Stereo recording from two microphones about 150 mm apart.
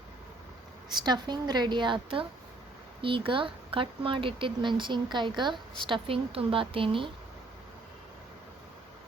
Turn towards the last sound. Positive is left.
turn(degrees=-35)  # may be behind; listen again after turning